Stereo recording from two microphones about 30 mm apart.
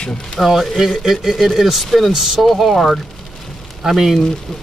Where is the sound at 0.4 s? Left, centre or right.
Centre.